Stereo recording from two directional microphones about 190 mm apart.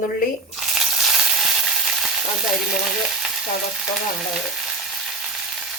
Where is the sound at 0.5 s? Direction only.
Centre (ahead or behind).